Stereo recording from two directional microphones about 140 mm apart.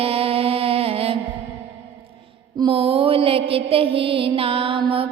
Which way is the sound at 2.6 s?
40° right (ahead or behind).